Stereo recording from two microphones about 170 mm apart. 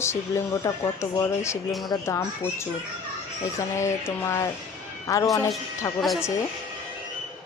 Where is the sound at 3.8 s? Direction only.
15° left (ahead or behind).